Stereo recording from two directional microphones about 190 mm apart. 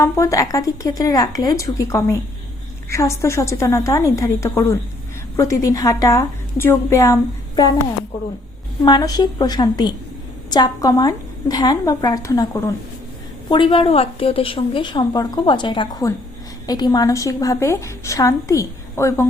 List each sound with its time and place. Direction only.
0.0 s a woman's voice: 15° left (ahead or behind)
8.8 s a woman's voice: 20° left (ahead or behind)
13.5 s a woman's voice: 25° left (ahead or behind)